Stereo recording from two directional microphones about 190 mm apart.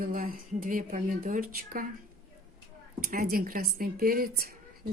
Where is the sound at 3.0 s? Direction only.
50° right (ahead or behind).